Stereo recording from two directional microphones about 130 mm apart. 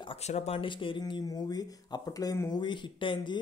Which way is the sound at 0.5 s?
40° left (ahead or behind).